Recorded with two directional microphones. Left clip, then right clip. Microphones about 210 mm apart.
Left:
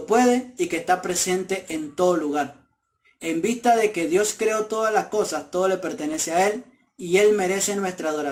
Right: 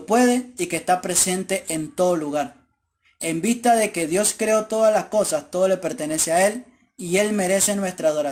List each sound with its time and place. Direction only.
0.1 s speech: 40° right (ahead or behind)